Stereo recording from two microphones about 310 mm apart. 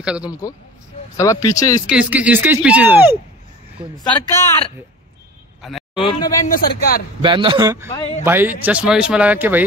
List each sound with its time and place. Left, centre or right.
0.0 s speech: centre
0.3 s speech: centre
1.9 s speech: centre
4.3 s speech: centre
5.6 s a sound: centre
5.9 s speech: centre
6.5 s a man's voice: left
7.2 s speech: centre